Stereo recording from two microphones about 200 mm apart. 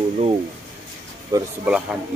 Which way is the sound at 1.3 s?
20° right (ahead or behind).